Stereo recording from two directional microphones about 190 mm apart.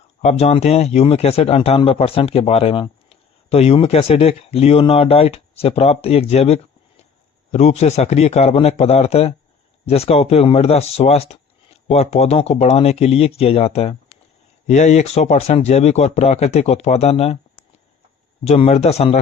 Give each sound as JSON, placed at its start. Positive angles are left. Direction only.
{"t": 0.2, "sound": "speech", "side_deg": 35}